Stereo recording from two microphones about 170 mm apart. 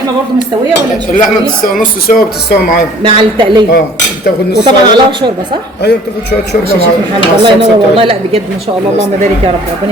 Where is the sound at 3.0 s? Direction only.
30° right (ahead or behind).